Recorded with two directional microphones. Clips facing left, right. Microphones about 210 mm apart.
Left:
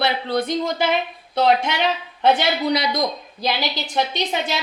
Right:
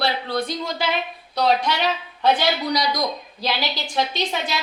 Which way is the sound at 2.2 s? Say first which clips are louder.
Left 2 dB; 25° left (ahead or behind).